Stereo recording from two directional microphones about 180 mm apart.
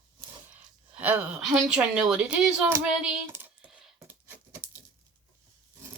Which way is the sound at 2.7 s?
5° right (ahead or behind).